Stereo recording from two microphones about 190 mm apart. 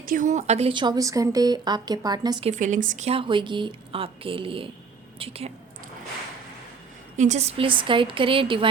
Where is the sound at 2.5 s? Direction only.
40° right (ahead or behind).